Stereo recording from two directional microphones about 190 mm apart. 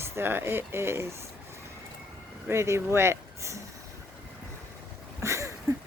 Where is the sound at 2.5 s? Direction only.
15° right (ahead or behind).